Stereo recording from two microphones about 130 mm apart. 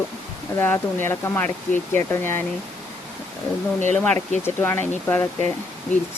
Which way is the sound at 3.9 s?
15° left (ahead or behind).